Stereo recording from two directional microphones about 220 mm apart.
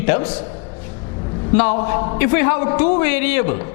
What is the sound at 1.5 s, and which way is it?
A man's voice, 10° left (ahead or behind).